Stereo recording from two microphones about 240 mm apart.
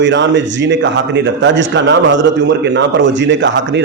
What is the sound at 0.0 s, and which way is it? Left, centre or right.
A man's voice, right.